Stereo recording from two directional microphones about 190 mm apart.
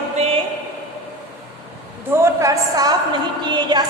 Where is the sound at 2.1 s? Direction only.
15° right (ahead or behind).